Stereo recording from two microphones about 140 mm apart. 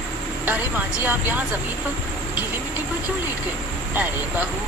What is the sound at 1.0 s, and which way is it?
Speech, 15° right (ahead or behind).